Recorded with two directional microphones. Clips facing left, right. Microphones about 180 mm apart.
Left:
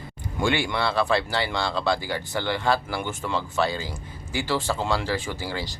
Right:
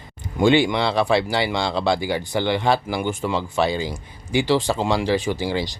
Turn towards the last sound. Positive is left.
turn(degrees=-15)  # may be behind; listen again after turning